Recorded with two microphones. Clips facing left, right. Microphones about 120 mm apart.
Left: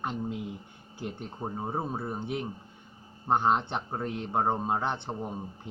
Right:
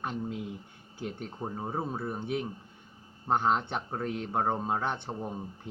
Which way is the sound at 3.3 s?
20° left (ahead or behind).